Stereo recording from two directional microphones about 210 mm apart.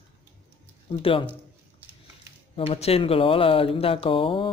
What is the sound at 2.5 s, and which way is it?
Speech, 25° left (ahead or behind).